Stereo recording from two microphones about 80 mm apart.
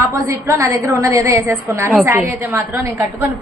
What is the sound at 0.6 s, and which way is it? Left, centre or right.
Speech, right.